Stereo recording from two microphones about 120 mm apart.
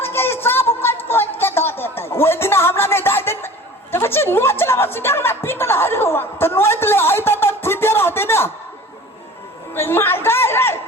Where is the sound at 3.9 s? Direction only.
20° left (ahead or behind).